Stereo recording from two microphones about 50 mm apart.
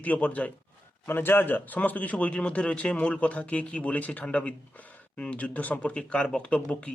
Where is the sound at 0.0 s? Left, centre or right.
Left.